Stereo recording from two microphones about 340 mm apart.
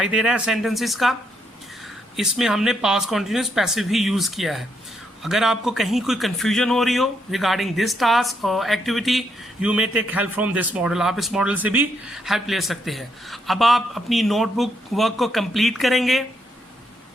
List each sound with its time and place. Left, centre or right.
0.0 s a man's voice: centre
2.1 s a man's voice: centre